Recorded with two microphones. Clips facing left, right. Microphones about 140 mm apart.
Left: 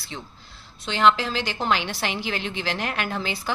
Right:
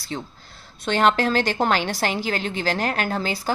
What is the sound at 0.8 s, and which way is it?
A woman's voice, 50° right (ahead or behind).